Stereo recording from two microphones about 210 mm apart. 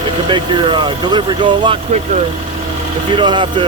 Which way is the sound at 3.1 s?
25° right (ahead or behind).